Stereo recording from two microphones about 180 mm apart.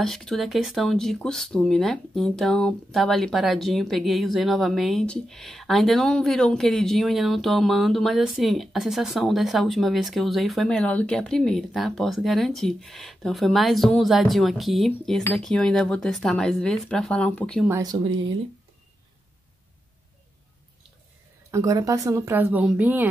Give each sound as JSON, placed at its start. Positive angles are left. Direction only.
{"t": 0.0, "sound": "speech", "side_deg": 0}
{"t": 17.6, "sound": "speech", "side_deg": -15}
{"t": 21.5, "sound": "speech", "side_deg": -20}